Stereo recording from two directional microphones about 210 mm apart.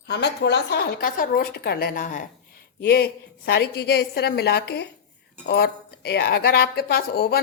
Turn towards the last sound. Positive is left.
turn(degrees=50)  # may be behind; listen again after turning